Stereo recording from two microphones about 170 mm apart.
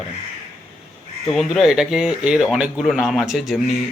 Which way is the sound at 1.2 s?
Centre (ahead or behind).